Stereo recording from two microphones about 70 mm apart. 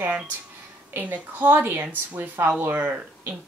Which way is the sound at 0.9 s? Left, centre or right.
Right.